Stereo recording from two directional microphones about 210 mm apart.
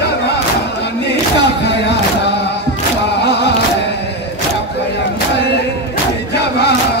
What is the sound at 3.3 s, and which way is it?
Music, 55° left (ahead or behind).